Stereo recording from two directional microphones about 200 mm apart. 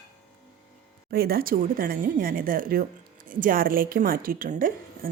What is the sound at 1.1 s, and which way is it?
A woman's voice, 50° right (ahead or behind).